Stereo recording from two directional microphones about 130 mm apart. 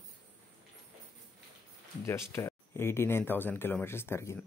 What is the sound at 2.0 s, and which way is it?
Speech, 20° left (ahead or behind).